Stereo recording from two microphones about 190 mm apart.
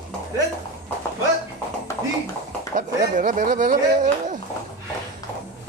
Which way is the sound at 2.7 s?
45° right (ahead or behind).